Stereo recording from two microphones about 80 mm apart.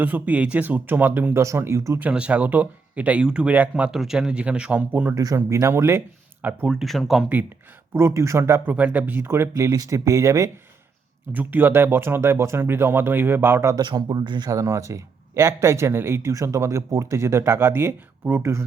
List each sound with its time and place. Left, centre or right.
0.0 s speech: right
2.0 s speech: centre
3.9 s speech: centre
5.1 s speech: right
5.4 s speech: right
6.7 s speech: centre
7.9 s speech: right
8.6 s speech: centre; by 9.7 s right
9.7 s speech: right
11.3 s speech: right
13.7 s speech: right
14.5 s speech: right